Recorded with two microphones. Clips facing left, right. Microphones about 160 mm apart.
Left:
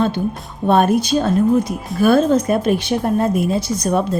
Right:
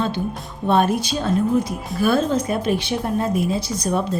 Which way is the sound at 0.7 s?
50° left (ahead or behind).